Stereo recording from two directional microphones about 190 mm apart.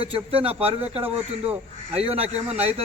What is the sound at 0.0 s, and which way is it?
A man's voice, 30° right (ahead or behind).